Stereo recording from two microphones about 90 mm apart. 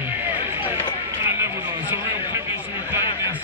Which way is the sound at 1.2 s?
30° right (ahead or behind).